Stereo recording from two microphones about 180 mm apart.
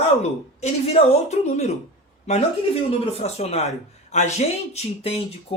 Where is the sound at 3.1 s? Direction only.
35° left (ahead or behind).